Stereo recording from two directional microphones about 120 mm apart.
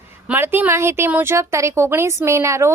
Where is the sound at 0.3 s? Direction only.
15° right (ahead or behind).